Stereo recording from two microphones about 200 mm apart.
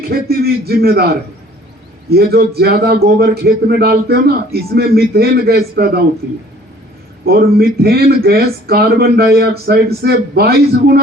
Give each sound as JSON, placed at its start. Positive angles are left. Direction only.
{"t": 0.1, "sound": "speech", "side_deg": -50}
{"t": 7.3, "sound": "speech", "side_deg": -50}